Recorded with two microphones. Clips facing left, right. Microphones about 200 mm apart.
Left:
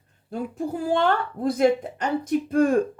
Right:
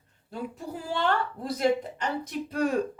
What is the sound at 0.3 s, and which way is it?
Speech, 50° left (ahead or behind).